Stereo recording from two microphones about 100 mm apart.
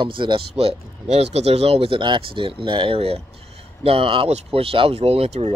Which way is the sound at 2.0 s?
55° right (ahead or behind).